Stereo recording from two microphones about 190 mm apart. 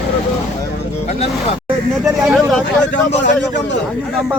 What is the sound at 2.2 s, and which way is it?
Speech, centre (ahead or behind).